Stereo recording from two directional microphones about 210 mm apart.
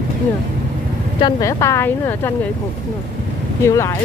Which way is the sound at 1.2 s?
20° left (ahead or behind).